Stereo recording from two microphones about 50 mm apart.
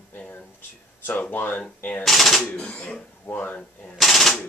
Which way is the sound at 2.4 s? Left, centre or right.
Left.